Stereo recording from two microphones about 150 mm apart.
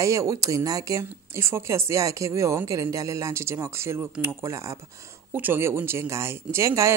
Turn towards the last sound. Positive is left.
turn(degrees=-20)  # may be behind; listen again after turning